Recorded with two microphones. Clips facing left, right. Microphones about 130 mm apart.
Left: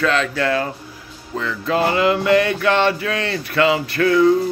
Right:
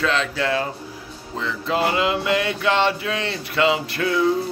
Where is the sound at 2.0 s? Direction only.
20° right (ahead or behind).